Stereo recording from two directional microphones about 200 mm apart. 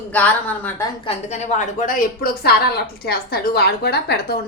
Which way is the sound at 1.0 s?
35° left (ahead or behind).